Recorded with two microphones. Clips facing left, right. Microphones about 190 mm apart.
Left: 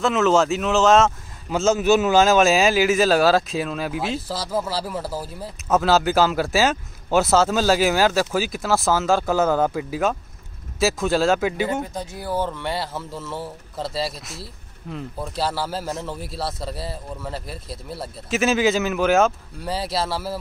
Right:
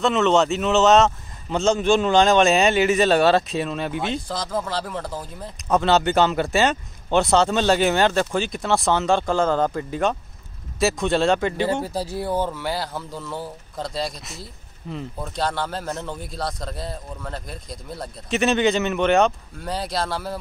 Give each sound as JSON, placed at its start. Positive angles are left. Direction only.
{"t": 0.0, "sound": "speech", "side_deg": 0}
{"t": 11.7, "sound": "speech", "side_deg": -35}
{"t": 12.3, "sound": "speech", "side_deg": -10}